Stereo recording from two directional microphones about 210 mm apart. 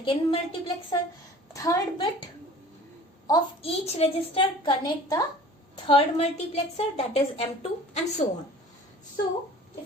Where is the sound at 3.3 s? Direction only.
30° left (ahead or behind).